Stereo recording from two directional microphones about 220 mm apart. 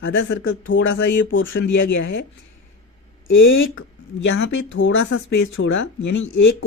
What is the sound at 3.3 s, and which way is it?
Speech, 60° left (ahead or behind).